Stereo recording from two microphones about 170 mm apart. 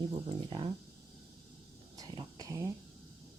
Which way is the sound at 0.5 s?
25° right (ahead or behind).